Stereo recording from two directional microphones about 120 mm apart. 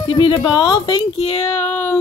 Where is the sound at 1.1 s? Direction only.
55° left (ahead or behind).